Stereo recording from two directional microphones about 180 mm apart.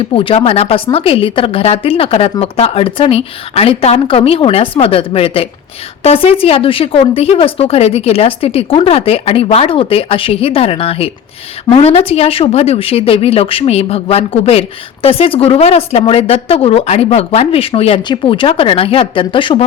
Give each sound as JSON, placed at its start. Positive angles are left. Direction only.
{"t": 0.1, "sound": "speech", "side_deg": 30}